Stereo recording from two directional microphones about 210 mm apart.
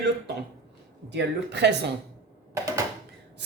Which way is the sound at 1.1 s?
55° right (ahead or behind).